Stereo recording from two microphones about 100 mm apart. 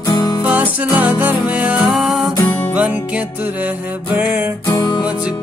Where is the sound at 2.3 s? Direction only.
40° left (ahead or behind).